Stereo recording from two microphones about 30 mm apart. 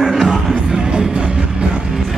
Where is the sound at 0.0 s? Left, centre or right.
Centre.